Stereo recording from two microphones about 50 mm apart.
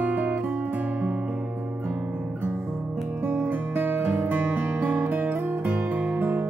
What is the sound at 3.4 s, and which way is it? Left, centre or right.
Guitar, right.